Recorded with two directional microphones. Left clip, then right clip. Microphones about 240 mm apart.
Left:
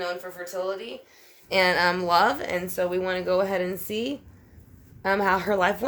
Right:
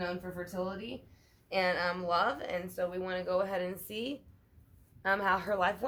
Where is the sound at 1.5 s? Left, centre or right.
Left.